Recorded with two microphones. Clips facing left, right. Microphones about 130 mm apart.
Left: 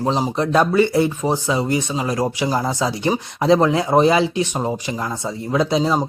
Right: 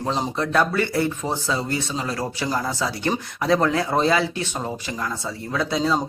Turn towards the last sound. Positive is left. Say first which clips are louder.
# left 4 dB
turn(degrees=20)  # may be behind; listen again after turning